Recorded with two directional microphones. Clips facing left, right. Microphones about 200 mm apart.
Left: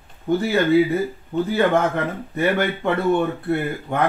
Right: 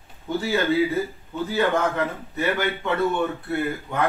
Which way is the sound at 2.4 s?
55° left (ahead or behind).